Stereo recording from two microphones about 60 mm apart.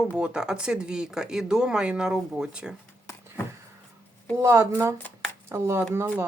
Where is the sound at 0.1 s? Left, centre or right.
Centre.